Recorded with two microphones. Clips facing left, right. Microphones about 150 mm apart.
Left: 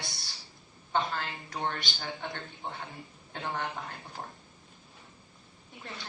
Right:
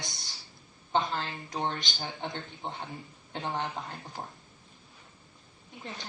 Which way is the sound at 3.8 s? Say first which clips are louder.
Right 1 dB; 20° right (ahead or behind).